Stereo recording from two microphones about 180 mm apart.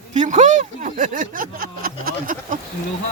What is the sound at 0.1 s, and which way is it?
Speech, 40° right (ahead or behind).